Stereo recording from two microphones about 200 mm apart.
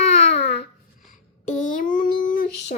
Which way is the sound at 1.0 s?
40° left (ahead or behind).